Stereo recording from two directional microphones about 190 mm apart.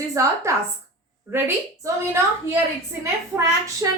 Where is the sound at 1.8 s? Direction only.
15° right (ahead or behind).